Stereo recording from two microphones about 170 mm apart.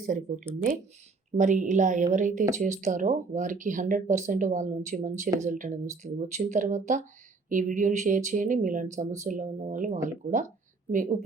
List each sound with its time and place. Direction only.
0.0 s speech: 50° right (ahead or behind)